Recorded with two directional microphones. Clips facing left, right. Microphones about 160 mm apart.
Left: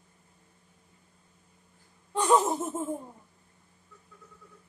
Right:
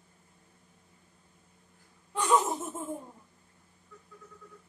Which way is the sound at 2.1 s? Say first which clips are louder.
Left 3 dB; 30° left (ahead or behind).